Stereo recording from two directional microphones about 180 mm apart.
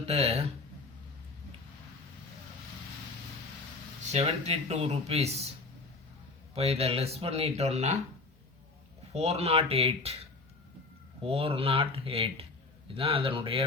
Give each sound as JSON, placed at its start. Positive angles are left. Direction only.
{"t": 0.0, "sound": "speech", "side_deg": -35}
{"t": 4.1, "sound": "speech", "side_deg": -35}
{"t": 6.5, "sound": "speech", "side_deg": -35}
{"t": 9.1, "sound": "speech", "side_deg": -35}
{"t": 11.2, "sound": "speech", "side_deg": -30}